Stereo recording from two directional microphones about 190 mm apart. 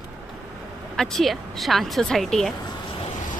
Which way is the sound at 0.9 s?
Centre (ahead or behind).